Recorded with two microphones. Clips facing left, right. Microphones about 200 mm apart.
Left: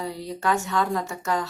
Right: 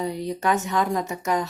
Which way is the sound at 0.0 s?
20° right (ahead or behind).